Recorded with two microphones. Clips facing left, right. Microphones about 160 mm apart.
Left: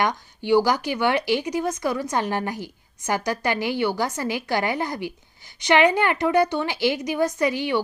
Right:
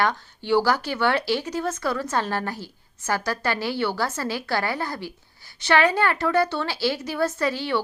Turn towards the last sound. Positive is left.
turn(degrees=15)  # may be behind; listen again after turning